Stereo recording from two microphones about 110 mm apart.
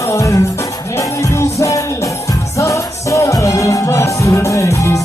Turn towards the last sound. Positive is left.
turn(degrees=25)  # may be behind; listen again after turning